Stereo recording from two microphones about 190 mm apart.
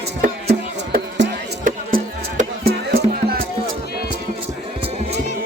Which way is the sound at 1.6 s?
45° right (ahead or behind).